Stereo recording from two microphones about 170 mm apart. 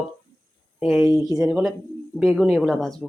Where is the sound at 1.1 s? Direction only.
20° right (ahead or behind).